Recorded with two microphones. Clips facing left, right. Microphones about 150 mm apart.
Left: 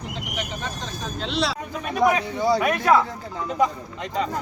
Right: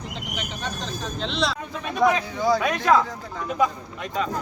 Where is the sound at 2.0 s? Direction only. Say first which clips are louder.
Even; 20° left (ahead or behind).